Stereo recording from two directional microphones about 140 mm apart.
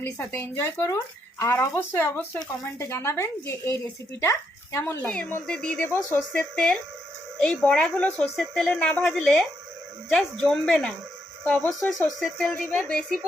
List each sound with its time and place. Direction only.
0.0 s a woman's voice: 15° left (ahead or behind)
4.8 s a woman's voice: 10° left (ahead or behind)